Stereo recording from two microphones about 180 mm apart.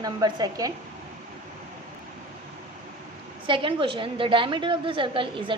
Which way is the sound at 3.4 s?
30° right (ahead or behind).